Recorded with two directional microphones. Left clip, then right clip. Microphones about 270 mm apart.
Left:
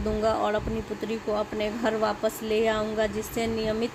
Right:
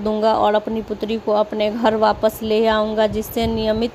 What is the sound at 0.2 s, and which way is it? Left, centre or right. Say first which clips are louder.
A woman's voice: right 10 dB; right.